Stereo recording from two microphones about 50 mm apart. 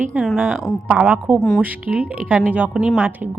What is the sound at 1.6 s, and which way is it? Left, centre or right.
Speech, right.